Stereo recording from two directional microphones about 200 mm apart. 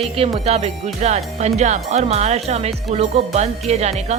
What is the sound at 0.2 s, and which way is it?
Speech, 30° right (ahead or behind).